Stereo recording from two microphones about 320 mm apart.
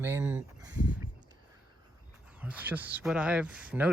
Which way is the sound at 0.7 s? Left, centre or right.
Left.